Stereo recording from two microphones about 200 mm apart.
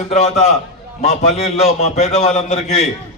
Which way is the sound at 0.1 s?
35° left (ahead or behind).